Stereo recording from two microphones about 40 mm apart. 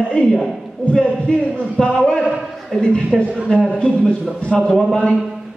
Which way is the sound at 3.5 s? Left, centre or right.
Left.